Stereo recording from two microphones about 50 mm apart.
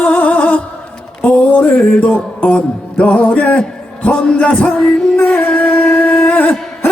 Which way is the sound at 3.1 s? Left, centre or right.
Left.